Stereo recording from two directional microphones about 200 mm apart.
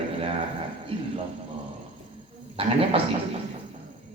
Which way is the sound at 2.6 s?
30° right (ahead or behind).